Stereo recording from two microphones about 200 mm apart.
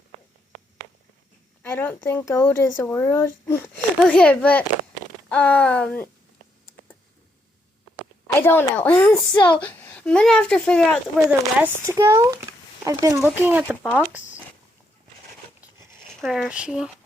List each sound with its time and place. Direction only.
1.6 s speech: 10° left (ahead or behind)
7.9 s speech: 10° left (ahead or behind)
11.6 s speech: 15° right (ahead or behind)
16.2 s speech: centre (ahead or behind)